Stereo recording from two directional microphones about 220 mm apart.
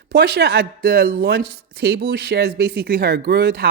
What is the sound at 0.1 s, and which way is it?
Speech, 45° right (ahead or behind).